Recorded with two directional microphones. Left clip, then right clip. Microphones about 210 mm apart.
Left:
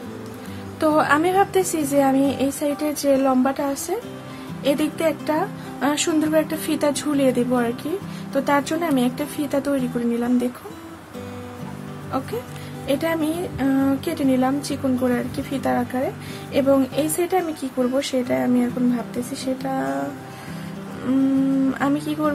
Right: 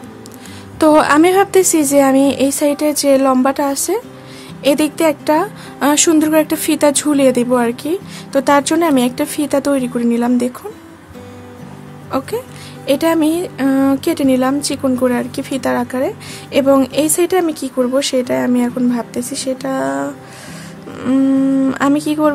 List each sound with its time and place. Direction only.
0.7 s speech: 50° right (ahead or behind)
12.1 s speech: 50° right (ahead or behind)
21.6 s speech: 50° right (ahead or behind)